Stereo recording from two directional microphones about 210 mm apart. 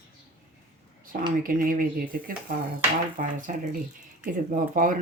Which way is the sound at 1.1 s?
45° right (ahead or behind).